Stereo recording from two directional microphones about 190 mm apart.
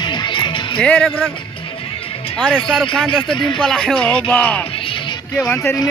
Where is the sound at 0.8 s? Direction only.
5° left (ahead or behind).